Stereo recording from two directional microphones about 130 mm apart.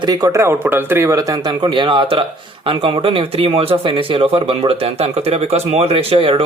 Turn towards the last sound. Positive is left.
turn(degrees=-45)  # may be behind; listen again after turning